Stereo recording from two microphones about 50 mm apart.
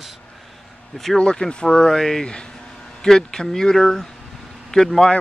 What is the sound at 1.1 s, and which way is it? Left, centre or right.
Speech, centre.